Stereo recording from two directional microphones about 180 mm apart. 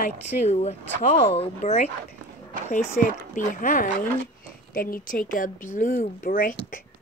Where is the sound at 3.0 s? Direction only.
45° left (ahead or behind).